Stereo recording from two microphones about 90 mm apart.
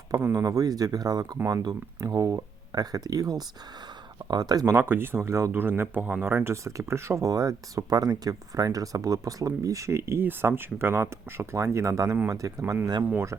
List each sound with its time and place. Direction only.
0.2 s speech: 25° right (ahead or behind)
0.4 s speech: 40° right (ahead or behind)
4.6 s speech: 25° right (ahead or behind)